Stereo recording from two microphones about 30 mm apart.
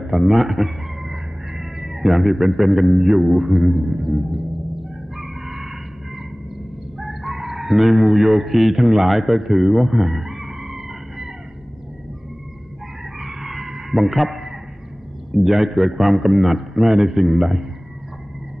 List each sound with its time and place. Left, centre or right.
0.0 s chicken: centre
7.0 s chicken: centre
13.2 s a sound: centre
15.3 s a man's voice: centre